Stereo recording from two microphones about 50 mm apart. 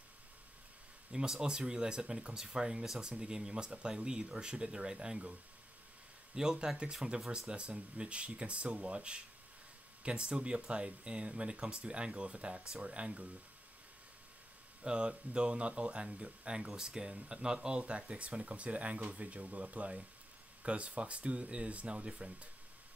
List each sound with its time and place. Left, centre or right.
1.1 s speech: centre
6.3 s speech: centre
14.8 s speech: right